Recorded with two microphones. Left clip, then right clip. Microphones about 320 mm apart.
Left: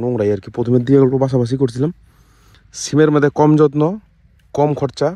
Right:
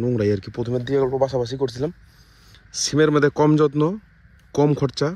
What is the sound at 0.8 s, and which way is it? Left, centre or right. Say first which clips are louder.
Speech: left 6 dB; left.